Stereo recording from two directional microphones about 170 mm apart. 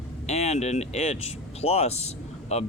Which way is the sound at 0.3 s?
40° left (ahead or behind).